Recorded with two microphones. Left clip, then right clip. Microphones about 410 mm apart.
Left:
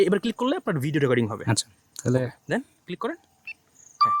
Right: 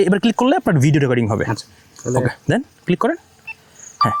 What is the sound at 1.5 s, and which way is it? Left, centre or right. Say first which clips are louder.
Speech: right 2 dB; left.